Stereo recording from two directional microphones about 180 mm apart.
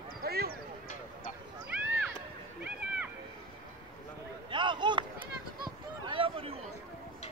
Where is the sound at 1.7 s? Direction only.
5° right (ahead or behind).